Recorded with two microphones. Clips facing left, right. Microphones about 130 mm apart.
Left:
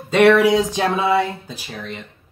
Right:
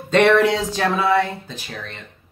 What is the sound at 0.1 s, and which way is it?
Speech, 5° left (ahead or behind).